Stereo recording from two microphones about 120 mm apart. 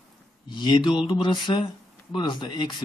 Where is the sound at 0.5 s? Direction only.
40° left (ahead or behind).